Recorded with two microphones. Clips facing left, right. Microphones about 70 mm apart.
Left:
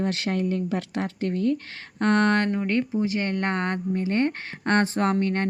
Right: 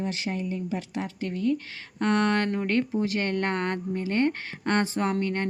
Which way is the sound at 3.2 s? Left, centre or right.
Left.